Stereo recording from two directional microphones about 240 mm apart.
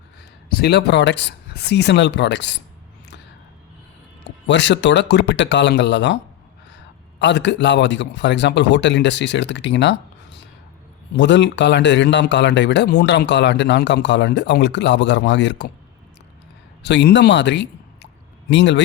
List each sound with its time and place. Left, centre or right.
0.5 s a man's voice: left
4.4 s a man's voice: left
16.8 s a man's voice: left